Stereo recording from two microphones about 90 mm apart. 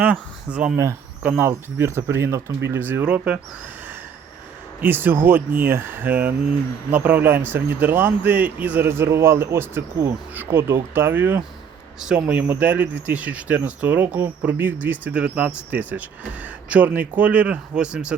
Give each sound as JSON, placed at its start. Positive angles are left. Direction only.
{"t": 0.0, "sound": "speech", "side_deg": -15}
{"t": 1.5, "sound": "a man's voice", "side_deg": -30}
{"t": 2.8, "sound": "speech", "side_deg": -15}
{"t": 4.8, "sound": "a man's voice", "side_deg": -20}
{"t": 11.9, "sound": "speech", "side_deg": -10}